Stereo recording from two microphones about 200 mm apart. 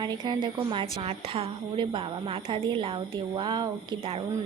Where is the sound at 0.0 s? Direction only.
20° right (ahead or behind).